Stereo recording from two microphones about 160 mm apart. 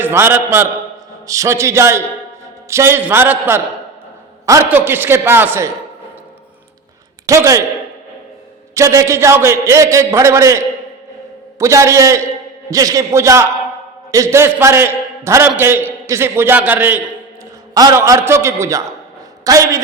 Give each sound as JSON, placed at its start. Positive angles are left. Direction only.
{"t": 0.0, "sound": "a man's voice", "side_deg": -15}
{"t": 7.3, "sound": "a man's voice", "side_deg": -20}
{"t": 8.7, "sound": "a man's voice", "side_deg": -20}
{"t": 11.6, "sound": "a man's voice", "side_deg": -20}